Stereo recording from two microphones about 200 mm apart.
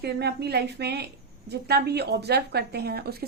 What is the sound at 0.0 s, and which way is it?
A woman's voice, 55° right (ahead or behind).